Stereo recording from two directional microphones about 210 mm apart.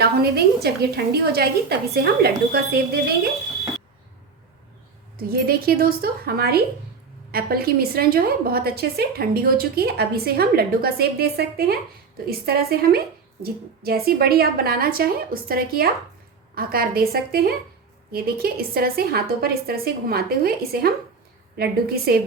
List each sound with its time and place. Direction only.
0.0 s a woman's voice: 50° right (ahead or behind)
5.1 s a woman's voice: 45° right (ahead or behind)